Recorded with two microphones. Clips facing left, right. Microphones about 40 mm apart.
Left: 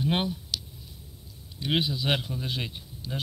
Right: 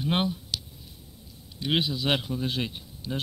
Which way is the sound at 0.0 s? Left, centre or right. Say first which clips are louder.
Right 1 dB; centre.